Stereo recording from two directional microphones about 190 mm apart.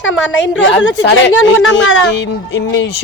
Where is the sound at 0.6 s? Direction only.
70° left (ahead or behind).